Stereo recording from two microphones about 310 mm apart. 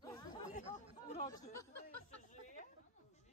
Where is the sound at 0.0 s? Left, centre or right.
Centre.